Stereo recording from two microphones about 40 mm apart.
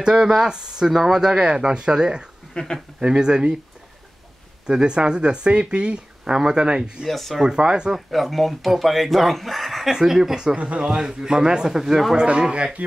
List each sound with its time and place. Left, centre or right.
0.0 s speech: centre
2.6 s speech: left
3.0 s speech: right
4.6 s speech: right
7.1 s speech: centre
7.4 s speech: centre
7.9 s speech: centre
9.8 s a man's voice: centre
12.2 s speech: centre